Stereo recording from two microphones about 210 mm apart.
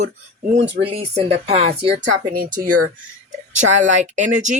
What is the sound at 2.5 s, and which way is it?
Speech, 90° right.